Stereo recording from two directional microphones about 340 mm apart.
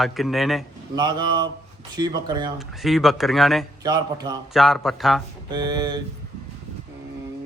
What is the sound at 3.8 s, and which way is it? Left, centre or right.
Speech, centre.